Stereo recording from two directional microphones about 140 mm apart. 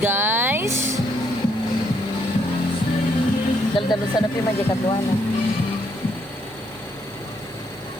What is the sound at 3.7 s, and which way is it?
Speech, 30° left (ahead or behind).